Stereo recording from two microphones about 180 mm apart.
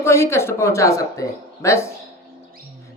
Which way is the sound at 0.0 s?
15° left (ahead or behind).